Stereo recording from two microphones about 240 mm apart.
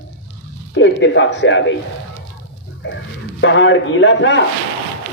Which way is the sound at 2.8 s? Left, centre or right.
Left.